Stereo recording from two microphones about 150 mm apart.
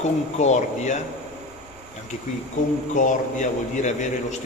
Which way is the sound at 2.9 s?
55° left (ahead or behind).